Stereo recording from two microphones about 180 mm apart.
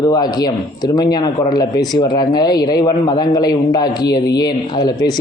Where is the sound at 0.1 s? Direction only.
20° left (ahead or behind).